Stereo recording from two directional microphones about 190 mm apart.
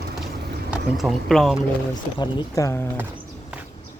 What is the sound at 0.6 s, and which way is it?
Speech, centre (ahead or behind).